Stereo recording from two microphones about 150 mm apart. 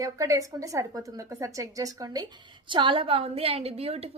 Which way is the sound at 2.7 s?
35° right (ahead or behind).